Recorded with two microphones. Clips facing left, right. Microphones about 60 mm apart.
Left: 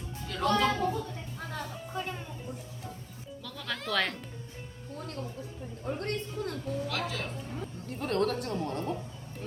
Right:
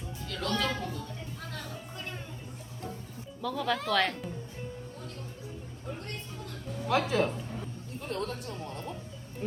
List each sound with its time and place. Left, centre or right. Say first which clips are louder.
0.3 s music: left 6 dB; centre
0.5 s a sound: left 5 dB; left
0.9 s music: left 4 dB; centre
3.4 s speech: right 7 dB; centre
6.0 s a sound: left 7 dB; left
6.8 s speech: right 7 dB; right
8.0 s speech: left 6 dB; left
9.4 s speech: right 4 dB; right